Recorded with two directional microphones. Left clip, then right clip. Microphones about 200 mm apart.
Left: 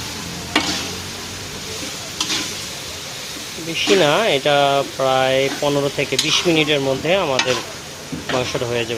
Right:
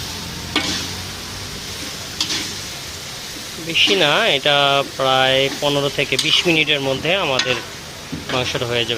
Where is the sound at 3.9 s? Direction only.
5° left (ahead or behind).